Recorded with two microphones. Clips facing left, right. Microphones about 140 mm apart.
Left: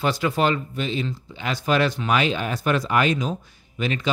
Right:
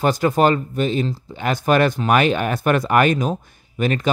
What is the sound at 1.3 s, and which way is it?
Speech, 50° right (ahead or behind).